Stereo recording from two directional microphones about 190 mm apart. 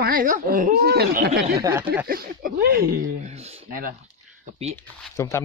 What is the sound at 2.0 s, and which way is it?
Speech, 50° right (ahead or behind).